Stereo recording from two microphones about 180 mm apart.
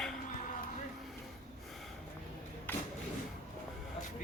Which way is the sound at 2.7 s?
10° left (ahead or behind).